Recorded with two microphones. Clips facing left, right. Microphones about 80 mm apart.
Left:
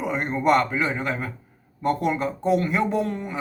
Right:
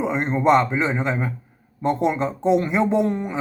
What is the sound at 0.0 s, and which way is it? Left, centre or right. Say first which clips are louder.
Speech: right 3 dB; right.